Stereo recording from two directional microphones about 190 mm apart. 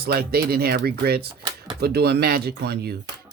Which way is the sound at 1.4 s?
20° right (ahead or behind).